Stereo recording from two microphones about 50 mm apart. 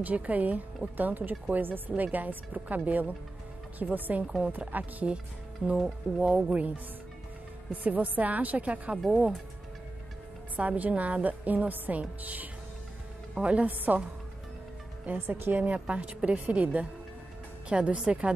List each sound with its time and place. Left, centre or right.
0.0 s a woman's voice: right
5.8 s speech: centre
6.3 s a woman's voice: right
7.7 s a woman's voice: right
8.9 s speech: centre
10.5 s a woman's voice: right
15.1 s a woman's voice: right; by 18.3 s centre